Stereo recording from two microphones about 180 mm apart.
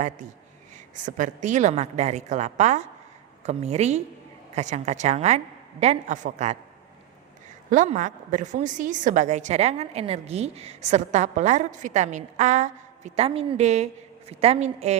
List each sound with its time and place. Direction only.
1.0 s a woman's voice: 45° right (ahead or behind)
7.7 s a woman's voice: 45° right (ahead or behind)